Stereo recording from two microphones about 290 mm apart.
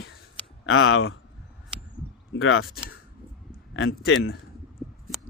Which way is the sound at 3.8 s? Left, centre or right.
Left.